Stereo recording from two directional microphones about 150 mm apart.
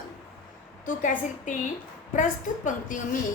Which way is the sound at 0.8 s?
60° left (ahead or behind).